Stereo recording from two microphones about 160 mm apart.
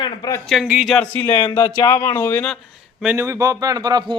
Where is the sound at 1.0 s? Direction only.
10° left (ahead or behind).